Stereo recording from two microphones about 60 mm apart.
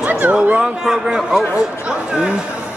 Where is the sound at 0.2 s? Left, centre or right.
Right.